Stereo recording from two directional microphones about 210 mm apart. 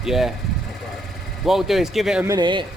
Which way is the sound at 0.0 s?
Centre (ahead or behind).